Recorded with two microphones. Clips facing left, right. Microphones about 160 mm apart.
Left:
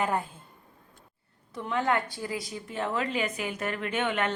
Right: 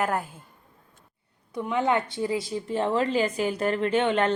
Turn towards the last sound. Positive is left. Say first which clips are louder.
# right 6 dB
turn(degrees=-30)  # may be behind; listen again after turning